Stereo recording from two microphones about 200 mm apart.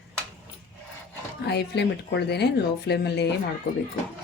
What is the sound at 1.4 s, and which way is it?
Speech, 55° left (ahead or behind).